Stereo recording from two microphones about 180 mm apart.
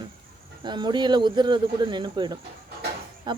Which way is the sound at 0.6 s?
25° right (ahead or behind).